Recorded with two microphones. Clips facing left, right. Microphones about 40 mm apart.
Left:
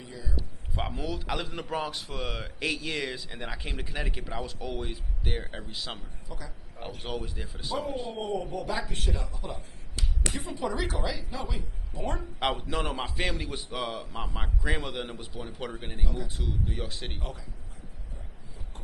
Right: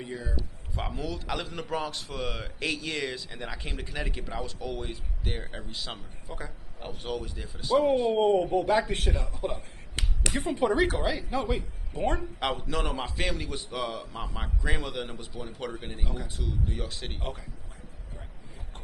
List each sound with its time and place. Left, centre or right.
0.0 s a man's voice: right
0.8 s a man's voice: centre
6.2 s a man's voice: right
7.0 s a man's voice: centre
8.1 s a man's voice: right
12.4 s a man's voice: centre
17.2 s a man's voice: right